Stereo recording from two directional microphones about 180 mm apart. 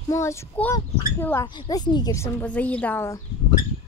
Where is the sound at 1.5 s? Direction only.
25° left (ahead or behind).